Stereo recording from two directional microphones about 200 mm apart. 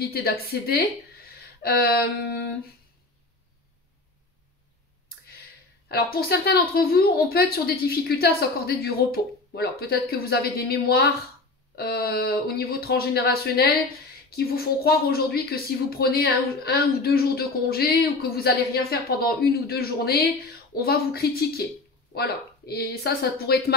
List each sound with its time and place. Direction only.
0.0 s speech: 50° left (ahead or behind)
5.9 s speech: 50° left (ahead or behind)